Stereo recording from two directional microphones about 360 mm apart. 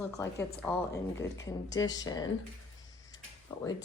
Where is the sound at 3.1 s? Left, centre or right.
Centre.